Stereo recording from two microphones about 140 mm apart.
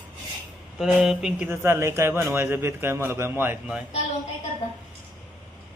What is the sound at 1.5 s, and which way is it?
A man's voice, 20° right (ahead or behind).